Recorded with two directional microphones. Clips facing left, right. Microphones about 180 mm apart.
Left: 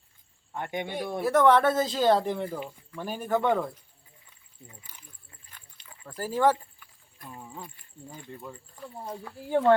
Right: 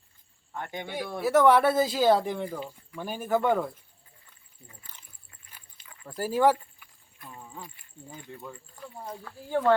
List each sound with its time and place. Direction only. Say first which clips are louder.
0.5 s speech: left 3 dB; 20° left (ahead or behind)
1.2 s speech: right 1 dB; 5° right (ahead or behind)
4.7 s speech: left 1 dB; 15° left (ahead or behind)
6.1 s speech: right 1 dB; 15° right (ahead or behind)
7.3 s a sound: left 1 dB; 5° left (ahead or behind)
8.1 s speech: even; 5° left (ahead or behind)
9.2 s speech: left 2 dB; 15° left (ahead or behind)